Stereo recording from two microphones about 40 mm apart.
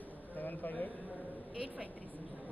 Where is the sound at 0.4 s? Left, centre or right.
Left.